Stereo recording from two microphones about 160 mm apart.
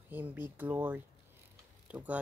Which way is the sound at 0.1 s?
10° right (ahead or behind).